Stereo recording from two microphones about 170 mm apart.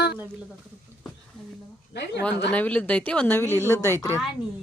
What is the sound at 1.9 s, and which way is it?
Speech, 80° left.